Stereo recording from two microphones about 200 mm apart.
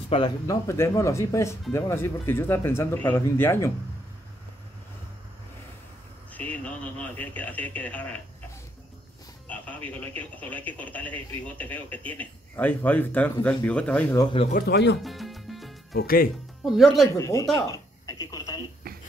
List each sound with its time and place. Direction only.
0.1 s speech: 20° left (ahead or behind)
6.3 s speech: 5° left (ahead or behind)
9.5 s speech: 5° left (ahead or behind)
14.2 s speech: 25° left (ahead or behind)
14.7 s speech: 60° left (ahead or behind)
15.0 s music: centre (ahead or behind)
15.9 s speech: 50° left (ahead or behind)
16.6 s speech: centre (ahead or behind)
17.2 s speech: 15° left (ahead or behind)
18.8 s a sound: 50° right (ahead or behind)